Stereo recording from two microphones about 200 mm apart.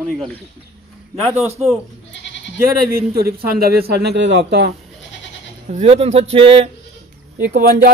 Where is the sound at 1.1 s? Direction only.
30° right (ahead or behind).